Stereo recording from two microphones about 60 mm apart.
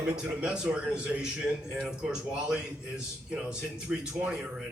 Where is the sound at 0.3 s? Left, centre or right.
Centre.